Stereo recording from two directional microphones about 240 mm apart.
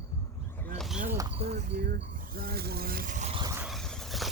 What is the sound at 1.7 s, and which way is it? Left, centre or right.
Vehicle, right.